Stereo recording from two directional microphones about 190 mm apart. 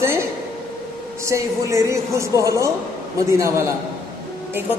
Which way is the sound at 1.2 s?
15° right (ahead or behind).